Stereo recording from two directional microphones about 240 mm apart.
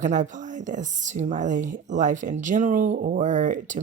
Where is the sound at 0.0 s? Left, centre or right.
Right.